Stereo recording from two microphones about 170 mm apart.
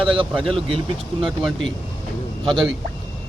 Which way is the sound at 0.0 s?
30° right (ahead or behind).